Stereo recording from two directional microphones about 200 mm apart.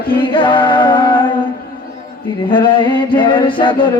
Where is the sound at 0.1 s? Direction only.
25° left (ahead or behind).